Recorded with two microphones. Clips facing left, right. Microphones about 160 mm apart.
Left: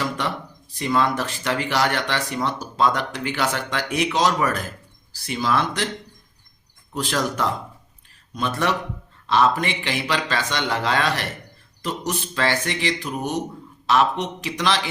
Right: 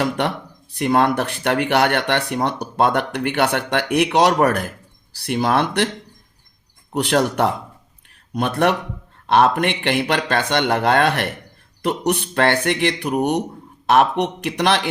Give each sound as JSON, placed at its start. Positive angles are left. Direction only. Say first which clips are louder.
{"t": 0.0, "sound": "speech", "louder": "right 5 dB", "side_deg": -60}
{"t": 6.9, "sound": "speech", "louder": "right 6 dB", "side_deg": -65}